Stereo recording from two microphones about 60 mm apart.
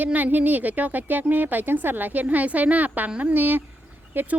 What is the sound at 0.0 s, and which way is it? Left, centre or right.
Speech, right.